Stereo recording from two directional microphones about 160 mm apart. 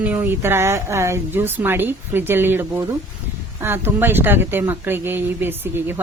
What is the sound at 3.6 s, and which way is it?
A woman's voice, 15° right (ahead or behind).